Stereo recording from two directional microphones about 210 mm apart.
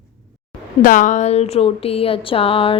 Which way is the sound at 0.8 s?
40° left (ahead or behind).